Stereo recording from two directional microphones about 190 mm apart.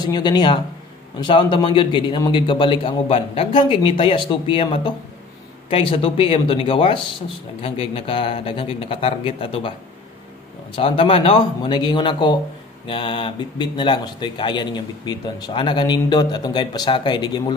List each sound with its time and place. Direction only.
0.0 s speech: 20° left (ahead or behind)
10.8 s speech: 30° left (ahead or behind)